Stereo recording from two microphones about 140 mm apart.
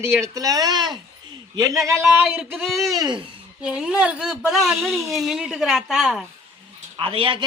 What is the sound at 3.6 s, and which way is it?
Speech, 5° right (ahead or behind).